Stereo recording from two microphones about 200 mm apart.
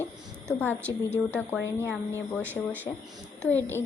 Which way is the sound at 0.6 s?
10° left (ahead or behind).